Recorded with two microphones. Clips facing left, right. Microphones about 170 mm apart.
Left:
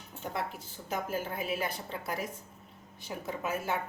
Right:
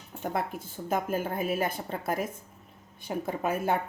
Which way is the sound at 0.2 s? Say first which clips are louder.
Right 5 dB; 50° right (ahead or behind).